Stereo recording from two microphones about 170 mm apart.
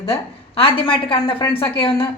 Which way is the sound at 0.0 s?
35° left (ahead or behind).